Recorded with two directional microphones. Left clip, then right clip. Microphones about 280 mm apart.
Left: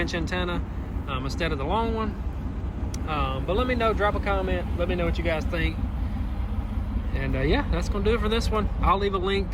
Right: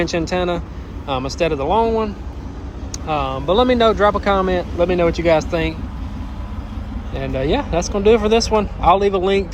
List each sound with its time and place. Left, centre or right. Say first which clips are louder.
0.0 s speech: right 9 dB; centre
3.1 s speech: right 9 dB; centre
7.1 s speech: right 7 dB; centre